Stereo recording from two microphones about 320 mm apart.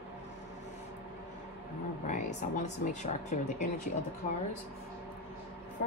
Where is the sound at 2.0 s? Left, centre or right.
Left.